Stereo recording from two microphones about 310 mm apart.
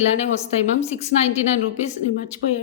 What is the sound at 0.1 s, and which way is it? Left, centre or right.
A woman's voice, left.